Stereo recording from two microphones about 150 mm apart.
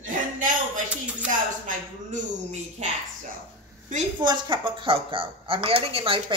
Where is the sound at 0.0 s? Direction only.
60° right (ahead or behind).